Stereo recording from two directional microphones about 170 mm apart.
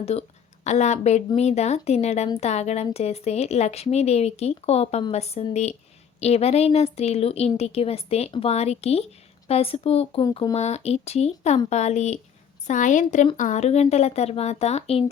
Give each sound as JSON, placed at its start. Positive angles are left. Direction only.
{"t": 0.0, "sound": "a woman's voice", "side_deg": 35}